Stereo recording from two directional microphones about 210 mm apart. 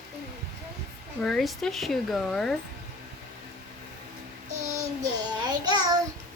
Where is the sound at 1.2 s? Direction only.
Centre (ahead or behind).